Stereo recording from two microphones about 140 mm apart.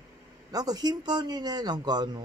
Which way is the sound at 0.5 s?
25° right (ahead or behind).